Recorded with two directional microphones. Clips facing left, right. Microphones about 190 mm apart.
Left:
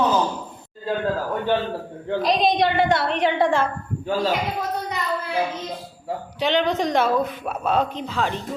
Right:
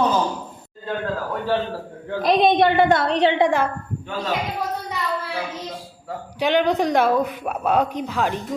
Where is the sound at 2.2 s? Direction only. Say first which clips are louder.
Right 4 dB; 55° right (ahead or behind).